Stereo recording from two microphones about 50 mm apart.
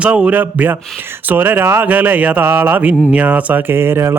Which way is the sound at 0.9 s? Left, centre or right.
Right.